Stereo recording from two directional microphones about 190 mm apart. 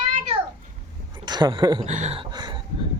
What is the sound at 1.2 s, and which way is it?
Speech, 20° right (ahead or behind).